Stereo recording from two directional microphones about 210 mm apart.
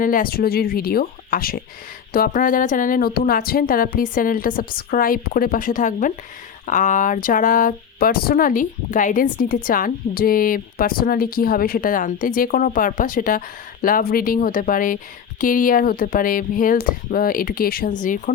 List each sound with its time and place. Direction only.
0.0 s a woman's voice: 40° left (ahead or behind)